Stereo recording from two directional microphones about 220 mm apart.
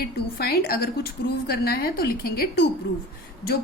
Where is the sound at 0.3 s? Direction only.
45° left (ahead or behind).